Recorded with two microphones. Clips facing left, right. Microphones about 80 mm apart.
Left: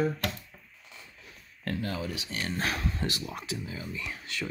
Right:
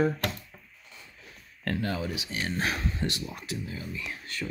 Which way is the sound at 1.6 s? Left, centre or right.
Right.